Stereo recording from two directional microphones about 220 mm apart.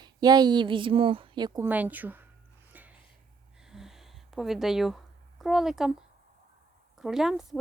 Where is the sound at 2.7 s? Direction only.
5° right (ahead or behind).